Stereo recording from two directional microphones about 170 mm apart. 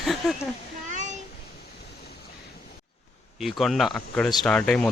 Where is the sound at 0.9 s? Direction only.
45° right (ahead or behind).